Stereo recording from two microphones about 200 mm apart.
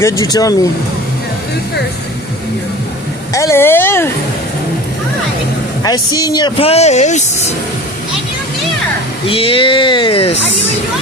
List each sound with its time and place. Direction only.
0.0 s speech: 15° left (ahead or behind)
3.3 s speech: 15° left (ahead or behind)
5.8 s speech: 20° left (ahead or behind); by 7.5 s 35° left (ahead or behind)
9.2 s speech: 25° left (ahead or behind)